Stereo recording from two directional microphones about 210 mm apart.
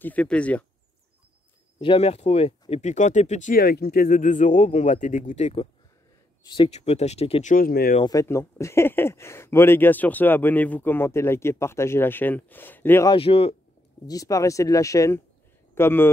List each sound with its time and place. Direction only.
0.0 s speech: 5° left (ahead or behind)
1.8 s speech: 25° left (ahead or behind)
7.5 s speech: 45° left (ahead or behind)
8.0 s speech: 15° left (ahead or behind)
13.1 s speech: 25° left (ahead or behind)
14.0 s speech: 15° left (ahead or behind)